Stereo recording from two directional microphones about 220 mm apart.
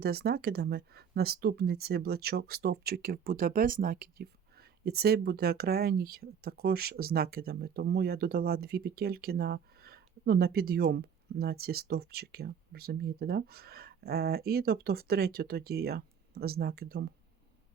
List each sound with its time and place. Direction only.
0.0 s speech: 45° right (ahead or behind)